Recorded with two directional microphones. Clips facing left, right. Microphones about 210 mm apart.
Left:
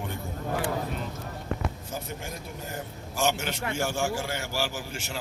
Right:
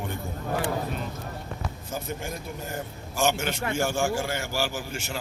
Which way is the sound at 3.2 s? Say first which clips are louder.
Right 2 dB; 50° right (ahead or behind).